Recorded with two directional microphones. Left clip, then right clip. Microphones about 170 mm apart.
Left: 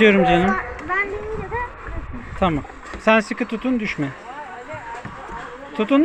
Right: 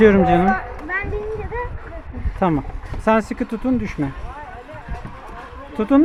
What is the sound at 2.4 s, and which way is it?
Speech, 30° right (ahead or behind).